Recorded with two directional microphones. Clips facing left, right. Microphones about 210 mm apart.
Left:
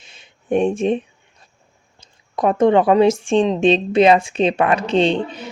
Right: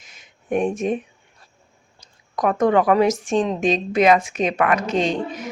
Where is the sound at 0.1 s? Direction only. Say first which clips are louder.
Left 4 dB; 30° left (ahead or behind).